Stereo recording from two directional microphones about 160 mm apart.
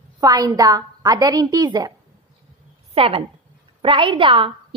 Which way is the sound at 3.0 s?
35° right (ahead or behind).